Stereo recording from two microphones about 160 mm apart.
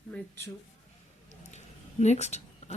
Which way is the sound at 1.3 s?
45° left (ahead or behind).